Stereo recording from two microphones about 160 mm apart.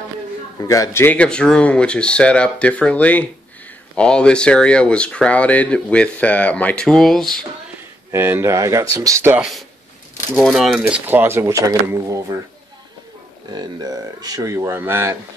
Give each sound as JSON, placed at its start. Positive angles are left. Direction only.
{"t": 0.6, "sound": "speech", "side_deg": 20}
{"t": 8.1, "sound": "speech", "side_deg": -15}
{"t": 9.4, "sound": "speech", "side_deg": 0}
{"t": 13.5, "sound": "speech", "side_deg": -25}